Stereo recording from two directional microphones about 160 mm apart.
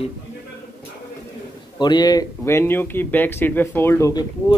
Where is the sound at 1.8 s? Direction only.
25° left (ahead or behind).